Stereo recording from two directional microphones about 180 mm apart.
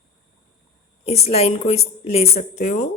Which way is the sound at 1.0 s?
35° left (ahead or behind).